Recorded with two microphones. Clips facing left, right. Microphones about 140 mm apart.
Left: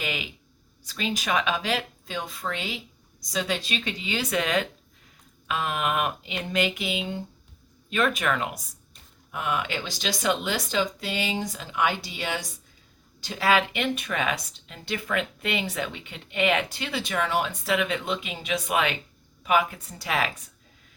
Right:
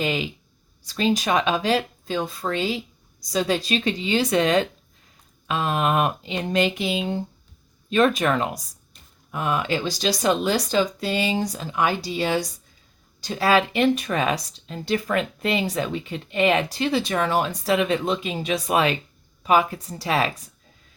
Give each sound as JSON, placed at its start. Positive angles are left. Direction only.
{"t": 0.0, "sound": "speech", "side_deg": -35}